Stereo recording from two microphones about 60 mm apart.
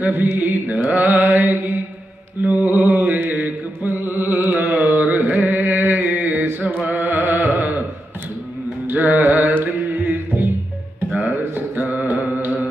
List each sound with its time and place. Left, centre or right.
0.0 s mantra: right
3.9 s carnatic music: right
8.8 s music: right
11.5 s mantra: right
12.3 s music: right